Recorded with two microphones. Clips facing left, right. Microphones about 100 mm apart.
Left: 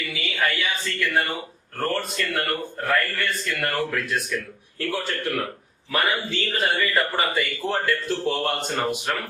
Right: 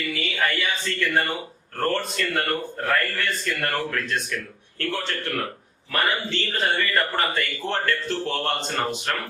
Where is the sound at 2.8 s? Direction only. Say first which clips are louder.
Left 1 dB; centre (ahead or behind).